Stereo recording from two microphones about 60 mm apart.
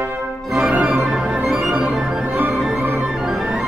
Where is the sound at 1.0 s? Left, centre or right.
Centre.